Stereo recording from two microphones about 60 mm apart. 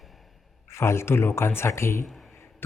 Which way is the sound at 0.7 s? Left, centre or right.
Left.